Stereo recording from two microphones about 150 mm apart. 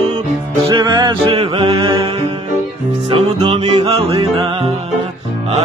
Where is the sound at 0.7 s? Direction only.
30° right (ahead or behind).